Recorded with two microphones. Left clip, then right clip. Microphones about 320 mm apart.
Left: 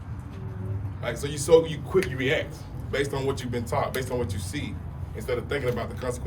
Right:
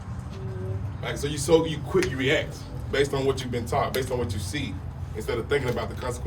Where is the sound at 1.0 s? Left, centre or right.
Centre.